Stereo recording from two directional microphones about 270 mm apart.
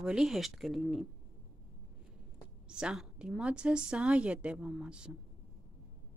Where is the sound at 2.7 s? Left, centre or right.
Centre.